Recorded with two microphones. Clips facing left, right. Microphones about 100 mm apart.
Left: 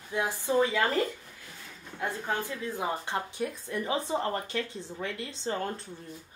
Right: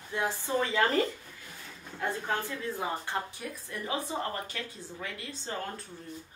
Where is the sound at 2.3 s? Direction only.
15° left (ahead or behind).